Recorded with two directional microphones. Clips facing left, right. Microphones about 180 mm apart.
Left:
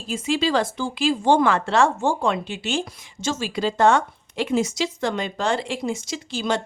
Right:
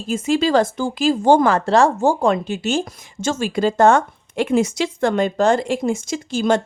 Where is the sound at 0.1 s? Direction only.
45° right (ahead or behind).